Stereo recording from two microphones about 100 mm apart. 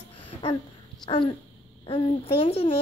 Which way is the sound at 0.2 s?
50° left (ahead or behind).